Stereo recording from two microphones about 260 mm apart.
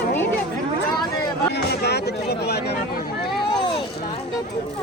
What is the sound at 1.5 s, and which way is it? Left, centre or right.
Speech, left.